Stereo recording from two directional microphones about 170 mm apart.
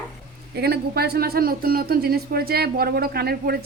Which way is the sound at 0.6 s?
70° right (ahead or behind).